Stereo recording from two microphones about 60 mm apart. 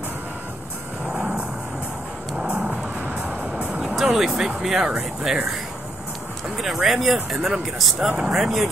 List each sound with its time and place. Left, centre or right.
1.1 s vehicle: centre
2.3 s music: centre
3.9 s speech: centre